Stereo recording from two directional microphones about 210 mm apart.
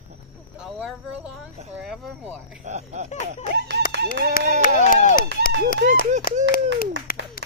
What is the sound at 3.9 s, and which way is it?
Speech, 50° right (ahead or behind).